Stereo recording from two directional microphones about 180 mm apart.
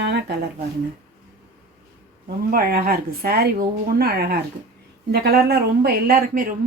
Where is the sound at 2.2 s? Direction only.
55° right (ahead or behind).